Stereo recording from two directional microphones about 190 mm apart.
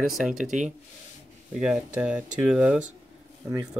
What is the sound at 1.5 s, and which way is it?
Speech, 5° right (ahead or behind).